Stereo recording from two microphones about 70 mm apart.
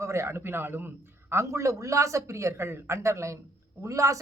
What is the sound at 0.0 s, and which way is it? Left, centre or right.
Speech, right.